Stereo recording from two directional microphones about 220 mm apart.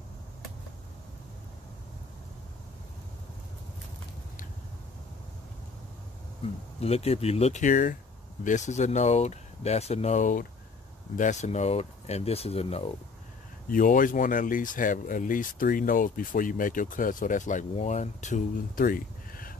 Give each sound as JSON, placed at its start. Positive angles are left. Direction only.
{"t": 6.4, "sound": "speech", "side_deg": 30}
{"t": 13.7, "sound": "speech", "side_deg": 40}